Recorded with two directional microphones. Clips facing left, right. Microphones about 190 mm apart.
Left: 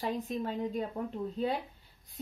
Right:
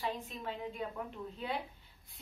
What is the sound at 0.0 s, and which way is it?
Speech, 40° left (ahead or behind).